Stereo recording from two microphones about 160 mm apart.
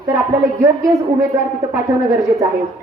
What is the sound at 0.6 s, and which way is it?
A woman's voice, 20° right (ahead or behind).